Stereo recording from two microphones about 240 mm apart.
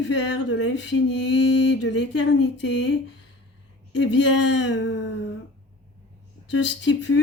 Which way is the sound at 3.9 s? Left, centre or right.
Left.